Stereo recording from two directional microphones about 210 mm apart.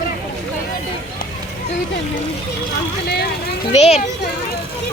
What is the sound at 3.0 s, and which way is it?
Speech, 50° left (ahead or behind).